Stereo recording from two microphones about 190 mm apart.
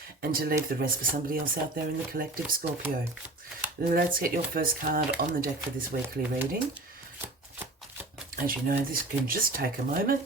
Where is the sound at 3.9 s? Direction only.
50° right (ahead or behind).